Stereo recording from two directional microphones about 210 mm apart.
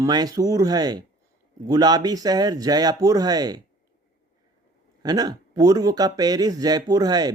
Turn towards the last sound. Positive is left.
turn(degrees=-20)  # may be behind; listen again after turning